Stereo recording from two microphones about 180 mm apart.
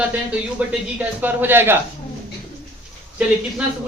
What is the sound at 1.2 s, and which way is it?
Speech, 10° right (ahead or behind).